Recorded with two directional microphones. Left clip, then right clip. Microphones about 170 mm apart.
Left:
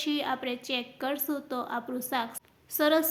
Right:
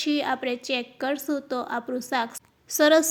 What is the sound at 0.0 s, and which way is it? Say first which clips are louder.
A woman's voice: right 5 dB; 30° right (ahead or behind).